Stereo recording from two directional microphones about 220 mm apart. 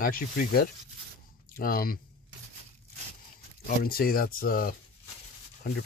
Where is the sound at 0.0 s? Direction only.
40° left (ahead or behind).